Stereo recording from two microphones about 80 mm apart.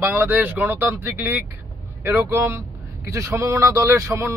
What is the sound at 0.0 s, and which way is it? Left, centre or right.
Speech, right.